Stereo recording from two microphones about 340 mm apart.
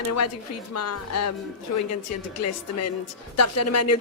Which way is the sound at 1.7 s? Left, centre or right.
Left.